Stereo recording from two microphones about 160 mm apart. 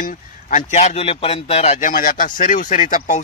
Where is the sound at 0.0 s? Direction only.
55° left (ahead or behind).